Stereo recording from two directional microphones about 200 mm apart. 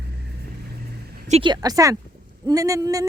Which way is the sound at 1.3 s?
25° right (ahead or behind).